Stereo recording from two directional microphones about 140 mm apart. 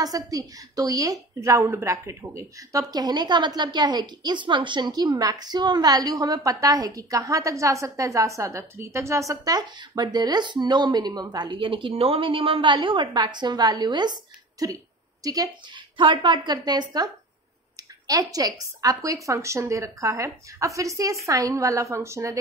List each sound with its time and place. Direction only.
0.0 s a woman's voice: 25° right (ahead or behind)